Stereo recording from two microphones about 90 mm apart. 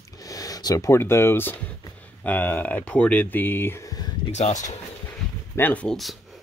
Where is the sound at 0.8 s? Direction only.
30° left (ahead or behind).